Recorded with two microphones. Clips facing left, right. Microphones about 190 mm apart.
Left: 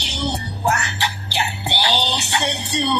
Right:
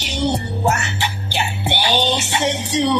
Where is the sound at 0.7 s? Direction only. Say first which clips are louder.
Right 1 dB; 20° right (ahead or behind).